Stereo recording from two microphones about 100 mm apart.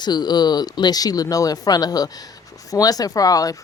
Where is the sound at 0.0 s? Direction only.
45° left (ahead or behind).